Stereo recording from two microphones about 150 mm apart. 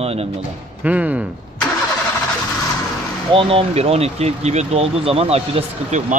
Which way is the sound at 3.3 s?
35° right (ahead or behind).